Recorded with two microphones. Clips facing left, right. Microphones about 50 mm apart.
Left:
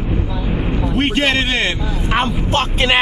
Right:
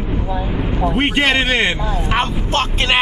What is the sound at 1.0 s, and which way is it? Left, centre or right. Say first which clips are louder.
Speech: even; centre.